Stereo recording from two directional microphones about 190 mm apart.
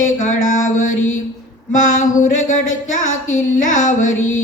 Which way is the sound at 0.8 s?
90° left.